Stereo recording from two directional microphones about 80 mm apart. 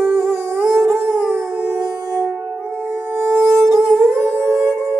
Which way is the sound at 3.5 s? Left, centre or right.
Centre.